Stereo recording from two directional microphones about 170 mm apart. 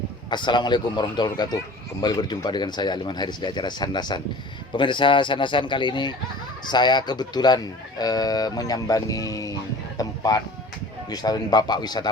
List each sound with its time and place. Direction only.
0.3 s speech: 25° left (ahead or behind)